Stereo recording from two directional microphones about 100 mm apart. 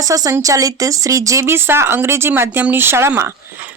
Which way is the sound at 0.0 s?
35° right (ahead or behind).